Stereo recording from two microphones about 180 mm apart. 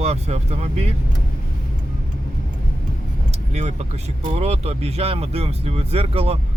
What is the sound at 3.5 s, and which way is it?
A man's voice, 40° right (ahead or behind).